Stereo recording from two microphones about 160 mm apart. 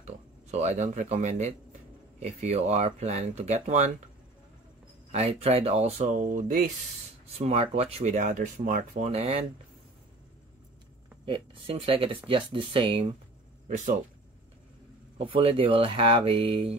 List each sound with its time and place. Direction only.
0.0 s speech: 45° right (ahead or behind)
5.1 s speech: 40° right (ahead or behind)
7.3 s speech: 40° right (ahead or behind)
11.2 s speech: 35° right (ahead or behind)
13.7 s speech: 50° right (ahead or behind)
15.1 s speech: 35° right (ahead or behind)